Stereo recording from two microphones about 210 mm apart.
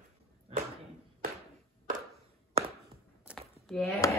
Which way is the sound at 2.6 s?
30° right (ahead or behind).